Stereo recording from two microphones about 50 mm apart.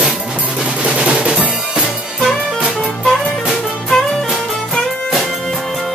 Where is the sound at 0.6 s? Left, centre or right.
Centre.